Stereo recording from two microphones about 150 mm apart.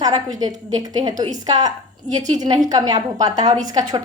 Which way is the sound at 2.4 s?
25° right (ahead or behind).